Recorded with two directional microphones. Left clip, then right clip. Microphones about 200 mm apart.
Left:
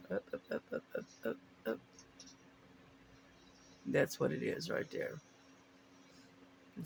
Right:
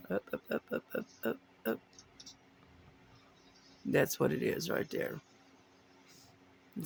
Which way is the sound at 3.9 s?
40° right (ahead or behind).